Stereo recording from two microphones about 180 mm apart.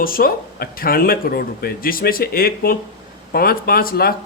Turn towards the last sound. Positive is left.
turn(degrees=55)  # may be behind; listen again after turning